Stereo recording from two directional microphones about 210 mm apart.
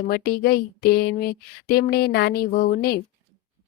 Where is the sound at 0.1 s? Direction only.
45° left (ahead or behind).